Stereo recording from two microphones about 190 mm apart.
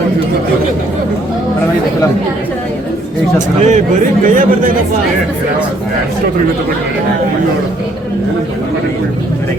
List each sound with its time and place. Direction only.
3.6 s speech: 40° right (ahead or behind)